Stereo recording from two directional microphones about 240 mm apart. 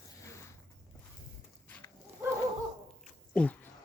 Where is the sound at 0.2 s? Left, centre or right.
Centre.